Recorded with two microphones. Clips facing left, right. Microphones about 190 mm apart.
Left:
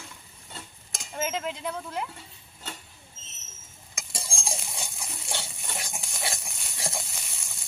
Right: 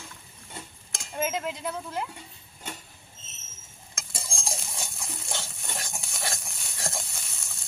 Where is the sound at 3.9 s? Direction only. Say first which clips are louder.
Left 1 dB; centre (ahead or behind).